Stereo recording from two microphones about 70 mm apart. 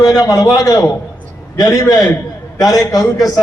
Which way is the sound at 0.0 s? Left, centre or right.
Left.